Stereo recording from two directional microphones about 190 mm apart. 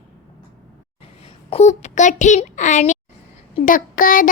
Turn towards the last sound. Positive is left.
turn(degrees=45)  # may be behind; listen again after turning